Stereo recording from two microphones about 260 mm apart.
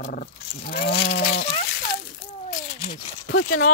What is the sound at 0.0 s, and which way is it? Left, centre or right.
Roaring cats, left.